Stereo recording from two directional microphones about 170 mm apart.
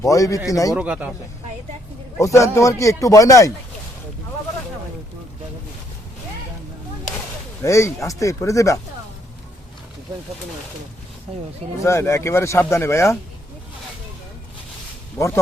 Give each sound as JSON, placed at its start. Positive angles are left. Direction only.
{"t": 0.0, "sound": "speech", "side_deg": 20}
{"t": 0.7, "sound": "speech", "side_deg": -5}
{"t": 2.1, "sound": "speech", "side_deg": 20}
{"t": 7.6, "sound": "speech", "side_deg": 15}
{"t": 11.8, "sound": "speech", "side_deg": 15}
{"t": 15.2, "sound": "speech", "side_deg": 15}